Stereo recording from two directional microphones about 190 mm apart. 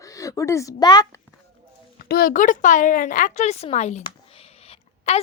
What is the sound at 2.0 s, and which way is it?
A woman's voice, 50° left (ahead or behind).